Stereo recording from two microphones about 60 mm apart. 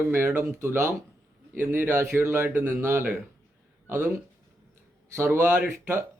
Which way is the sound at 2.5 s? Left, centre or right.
Right.